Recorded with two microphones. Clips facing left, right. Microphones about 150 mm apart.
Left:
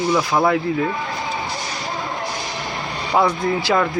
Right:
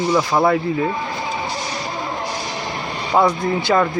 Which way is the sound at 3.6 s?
5° right (ahead or behind).